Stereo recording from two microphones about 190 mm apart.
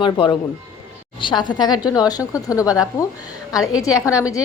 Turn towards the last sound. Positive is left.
turn(degrees=15)  # may be behind; listen again after turning